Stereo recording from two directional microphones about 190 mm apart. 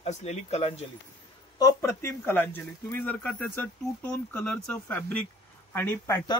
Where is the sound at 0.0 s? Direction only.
35° left (ahead or behind).